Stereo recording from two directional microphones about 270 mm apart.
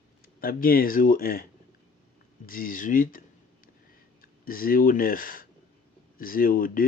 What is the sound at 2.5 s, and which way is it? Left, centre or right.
Speech, left.